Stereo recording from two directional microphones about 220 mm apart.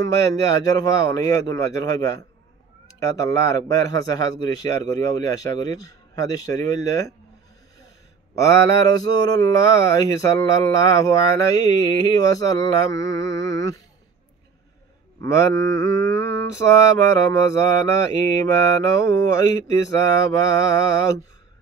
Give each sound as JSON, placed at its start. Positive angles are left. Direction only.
{"t": 0.2, "sound": "speech", "side_deg": 15}
{"t": 8.4, "sound": "speech", "side_deg": 15}
{"t": 15.1, "sound": "speech", "side_deg": 15}